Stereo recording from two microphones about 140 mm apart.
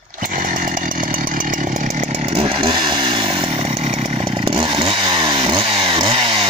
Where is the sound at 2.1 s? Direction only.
45° right (ahead or behind).